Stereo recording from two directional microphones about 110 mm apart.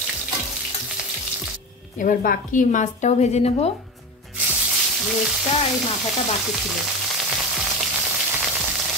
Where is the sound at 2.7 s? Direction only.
85° left.